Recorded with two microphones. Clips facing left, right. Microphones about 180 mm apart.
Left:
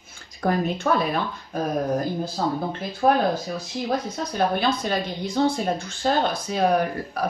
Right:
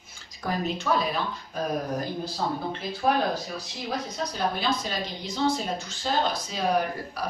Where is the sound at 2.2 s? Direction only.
50° left (ahead or behind).